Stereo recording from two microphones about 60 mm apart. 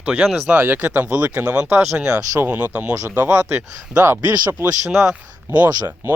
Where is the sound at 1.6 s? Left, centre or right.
Right.